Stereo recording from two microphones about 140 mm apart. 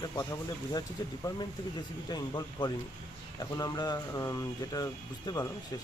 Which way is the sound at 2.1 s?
30° left (ahead or behind).